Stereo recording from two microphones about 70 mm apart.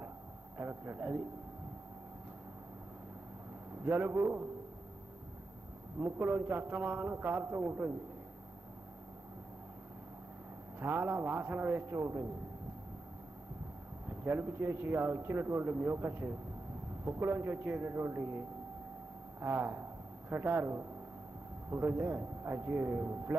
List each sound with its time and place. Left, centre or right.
0.6 s a man's voice: right
3.8 s a man's voice: right
5.9 s a man's voice: right
10.8 s a man's voice: right
14.0 s a man's voice: right
19.4 s a man's voice: right